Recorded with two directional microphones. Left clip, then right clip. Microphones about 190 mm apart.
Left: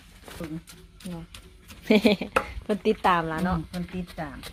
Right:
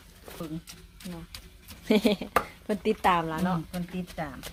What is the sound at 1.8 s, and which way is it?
Speech, 15° left (ahead or behind).